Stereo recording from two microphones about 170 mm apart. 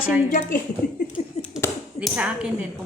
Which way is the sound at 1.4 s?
35° left (ahead or behind).